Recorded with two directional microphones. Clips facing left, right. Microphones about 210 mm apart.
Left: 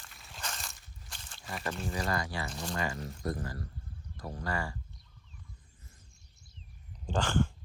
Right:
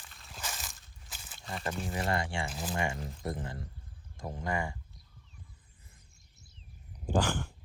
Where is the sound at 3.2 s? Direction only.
25° right (ahead or behind).